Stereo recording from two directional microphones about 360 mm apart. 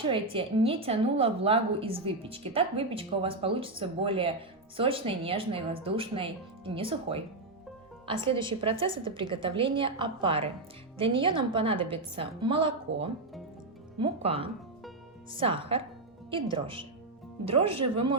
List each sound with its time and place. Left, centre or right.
0.0 s a woman's voice: centre
14.0 s a woman's voice: centre